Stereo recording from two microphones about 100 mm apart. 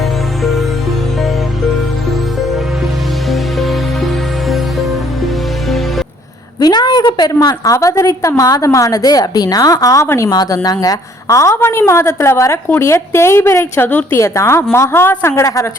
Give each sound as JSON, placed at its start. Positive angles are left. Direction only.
{"t": 3.2, "sound": "music", "side_deg": 0}
{"t": 6.6, "sound": "a woman's voice", "side_deg": 45}